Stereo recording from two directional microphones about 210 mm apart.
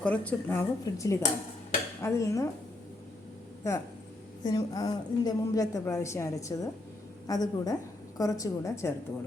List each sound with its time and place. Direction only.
0.0 s a woman's voice: 5° left (ahead or behind)
3.6 s a woman's voice: 15° left (ahead or behind)